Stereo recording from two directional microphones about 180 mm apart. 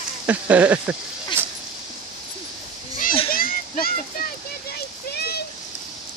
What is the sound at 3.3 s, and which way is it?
Children playing, 55° left (ahead or behind).